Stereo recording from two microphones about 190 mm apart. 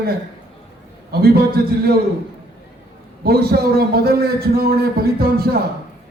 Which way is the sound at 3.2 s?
55° right (ahead or behind).